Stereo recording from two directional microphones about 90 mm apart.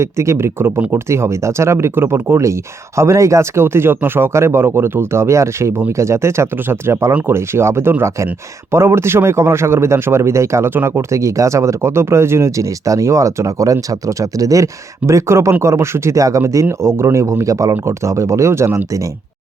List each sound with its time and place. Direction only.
0.0 s speech: 30° right (ahead or behind)